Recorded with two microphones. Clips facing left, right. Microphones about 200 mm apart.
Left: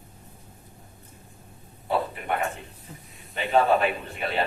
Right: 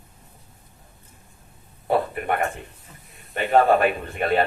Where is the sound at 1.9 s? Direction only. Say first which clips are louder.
Right 4 dB; 55° right (ahead or behind).